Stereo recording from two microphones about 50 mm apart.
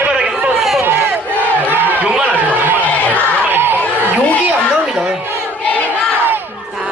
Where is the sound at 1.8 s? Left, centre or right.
Right.